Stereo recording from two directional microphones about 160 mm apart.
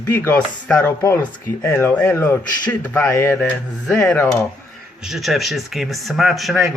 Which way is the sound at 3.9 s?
5° left (ahead or behind).